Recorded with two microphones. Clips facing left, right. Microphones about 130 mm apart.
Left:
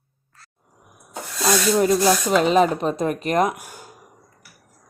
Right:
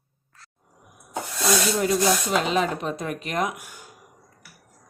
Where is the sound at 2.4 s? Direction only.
45° left (ahead or behind).